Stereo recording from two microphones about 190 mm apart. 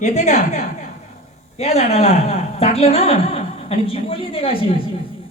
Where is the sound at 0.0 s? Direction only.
35° left (ahead or behind).